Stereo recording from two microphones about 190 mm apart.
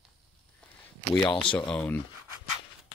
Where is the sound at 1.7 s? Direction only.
5° left (ahead or behind).